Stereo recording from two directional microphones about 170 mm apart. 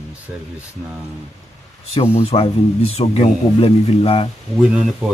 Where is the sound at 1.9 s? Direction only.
35° left (ahead or behind).